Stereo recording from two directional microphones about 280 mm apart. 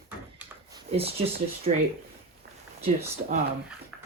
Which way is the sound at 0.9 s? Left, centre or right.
Right.